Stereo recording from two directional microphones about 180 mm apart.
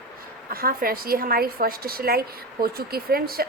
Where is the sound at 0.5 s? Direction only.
55° right (ahead or behind).